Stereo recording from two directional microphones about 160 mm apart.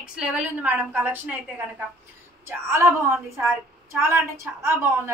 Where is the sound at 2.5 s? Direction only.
15° right (ahead or behind).